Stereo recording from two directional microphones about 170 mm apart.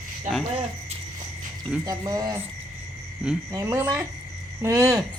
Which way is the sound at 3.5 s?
15° right (ahead or behind).